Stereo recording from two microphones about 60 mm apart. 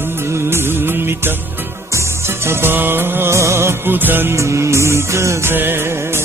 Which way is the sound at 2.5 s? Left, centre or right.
Right.